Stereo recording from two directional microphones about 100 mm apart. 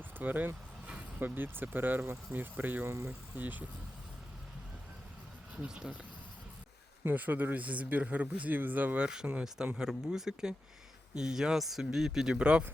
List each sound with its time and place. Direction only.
0.2 s speech: 15° right (ahead or behind)
3.3 s speech: 15° right (ahead or behind)
5.6 s speech: 10° right (ahead or behind)
7.0 s speech: 15° right (ahead or behind)